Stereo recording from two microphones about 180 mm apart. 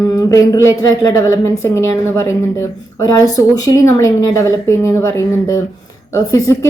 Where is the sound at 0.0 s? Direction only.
20° left (ahead or behind).